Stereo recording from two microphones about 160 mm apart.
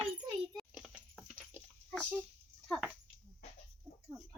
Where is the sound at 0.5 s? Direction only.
5° left (ahead or behind).